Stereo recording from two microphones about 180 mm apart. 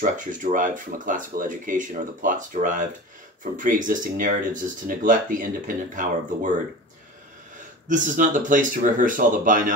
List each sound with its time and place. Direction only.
0.0 s speech: 45° right (ahead or behind)
7.9 s speech: 45° right (ahead or behind)